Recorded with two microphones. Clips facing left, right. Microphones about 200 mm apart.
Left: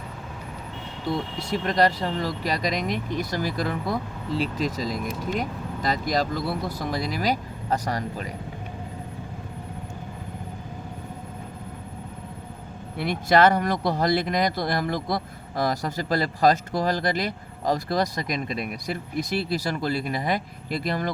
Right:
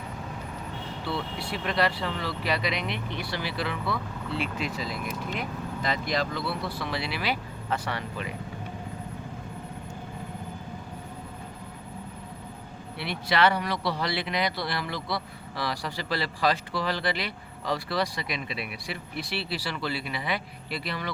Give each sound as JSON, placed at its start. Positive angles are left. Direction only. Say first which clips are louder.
{"t": 1.0, "sound": "speech", "louder": "left 5 dB", "side_deg": 45}
{"t": 13.0, "sound": "speech", "louder": "left 6 dB", "side_deg": 45}